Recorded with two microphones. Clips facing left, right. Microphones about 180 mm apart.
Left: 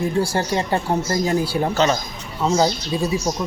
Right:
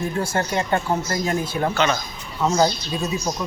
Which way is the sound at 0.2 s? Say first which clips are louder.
Left 1 dB; 30° left (ahead or behind).